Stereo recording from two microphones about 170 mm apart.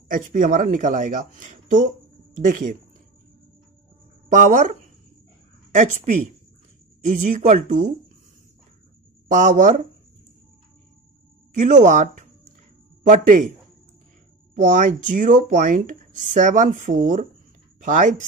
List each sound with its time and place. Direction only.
0.1 s speech: 50° right (ahead or behind)
4.3 s speech: 45° right (ahead or behind)
5.7 s speech: 45° right (ahead or behind)
9.3 s speech: 50° right (ahead or behind)
11.5 s speech: 45° right (ahead or behind)
14.5 s speech: 50° right (ahead or behind)